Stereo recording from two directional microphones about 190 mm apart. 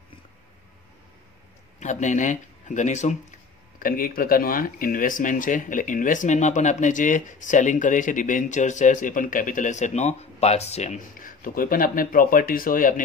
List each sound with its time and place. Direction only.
1.8 s speech: 40° left (ahead or behind)
3.8 s speech: 50° left (ahead or behind)